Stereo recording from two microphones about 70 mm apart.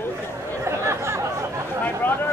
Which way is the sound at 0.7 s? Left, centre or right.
Right.